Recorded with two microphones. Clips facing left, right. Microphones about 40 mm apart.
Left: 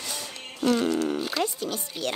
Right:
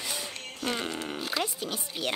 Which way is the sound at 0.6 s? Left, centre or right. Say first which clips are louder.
Left 9 dB; right.